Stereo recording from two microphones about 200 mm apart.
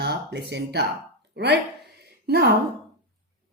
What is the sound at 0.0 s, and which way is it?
Speech, 55° right (ahead or behind).